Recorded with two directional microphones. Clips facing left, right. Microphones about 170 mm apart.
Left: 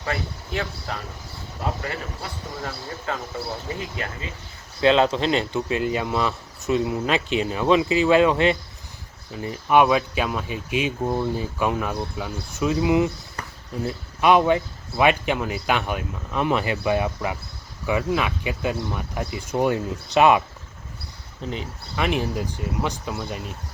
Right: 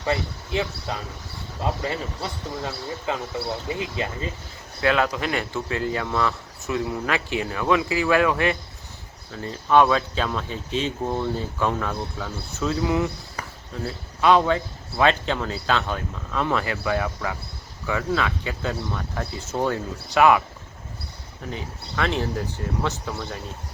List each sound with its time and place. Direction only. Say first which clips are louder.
0.0 s speech: right 3 dB; 20° right (ahead or behind)
2.6 s speech: right 1 dB; 10° right (ahead or behind)
4.8 s speech: left 4 dB; 25° left (ahead or behind)
21.4 s speech: left 2 dB; 20° left (ahead or behind)